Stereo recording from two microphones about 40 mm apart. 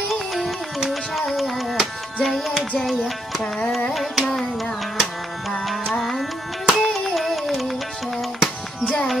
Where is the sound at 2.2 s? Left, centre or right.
Centre.